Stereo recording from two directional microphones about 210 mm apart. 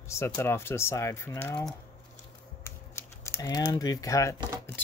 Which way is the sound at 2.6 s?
15° left (ahead or behind).